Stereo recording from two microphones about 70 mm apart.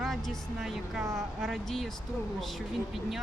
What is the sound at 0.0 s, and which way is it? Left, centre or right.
A woman's voice, centre.